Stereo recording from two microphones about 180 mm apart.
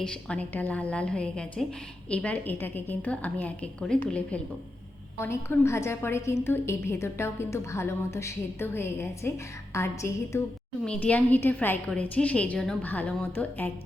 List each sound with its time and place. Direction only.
0.0 s a woman's voice: 5° left (ahead or behind)